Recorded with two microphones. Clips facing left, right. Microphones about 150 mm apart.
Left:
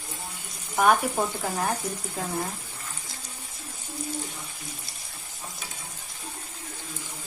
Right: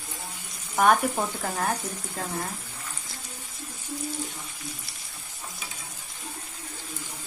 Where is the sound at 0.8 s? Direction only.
5° left (ahead or behind).